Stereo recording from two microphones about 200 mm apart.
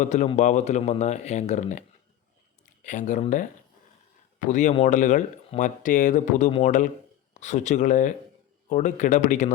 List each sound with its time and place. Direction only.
0.0 s speech: 35° left (ahead or behind)